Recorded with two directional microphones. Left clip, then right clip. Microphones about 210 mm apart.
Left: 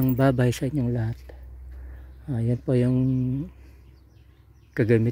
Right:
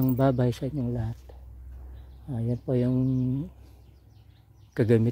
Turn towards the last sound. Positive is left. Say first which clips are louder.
# left 2 dB
turn(degrees=0)  # may be behind; listen again after turning